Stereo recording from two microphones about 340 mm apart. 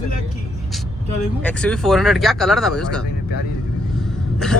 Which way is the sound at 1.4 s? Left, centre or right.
Centre.